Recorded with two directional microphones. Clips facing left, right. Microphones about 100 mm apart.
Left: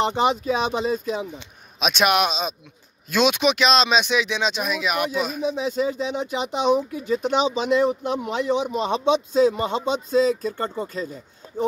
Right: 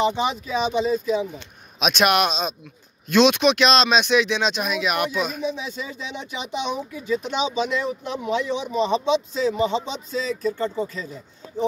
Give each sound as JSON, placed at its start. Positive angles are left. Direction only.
{"t": 0.1, "sound": "speech", "side_deg": 50}
{"t": 1.8, "sound": "speech", "side_deg": 5}
{"t": 5.6, "sound": "speech", "side_deg": 40}